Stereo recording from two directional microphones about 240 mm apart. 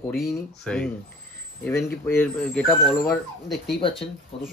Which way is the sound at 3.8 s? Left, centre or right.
Left.